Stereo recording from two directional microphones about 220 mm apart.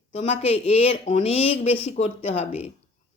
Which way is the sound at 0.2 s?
25° left (ahead or behind).